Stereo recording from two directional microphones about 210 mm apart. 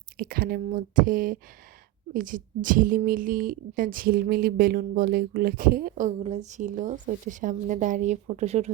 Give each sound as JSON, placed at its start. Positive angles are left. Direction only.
{"t": 0.2, "sound": "a woman's voice", "side_deg": -45}